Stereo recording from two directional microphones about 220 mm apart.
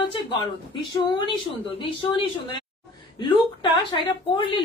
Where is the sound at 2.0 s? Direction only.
20° left (ahead or behind).